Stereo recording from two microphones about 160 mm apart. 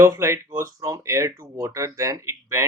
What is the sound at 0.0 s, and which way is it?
Speech, 15° right (ahead or behind).